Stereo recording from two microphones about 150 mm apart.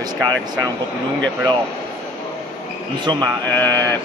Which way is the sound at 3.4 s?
15° left (ahead or behind).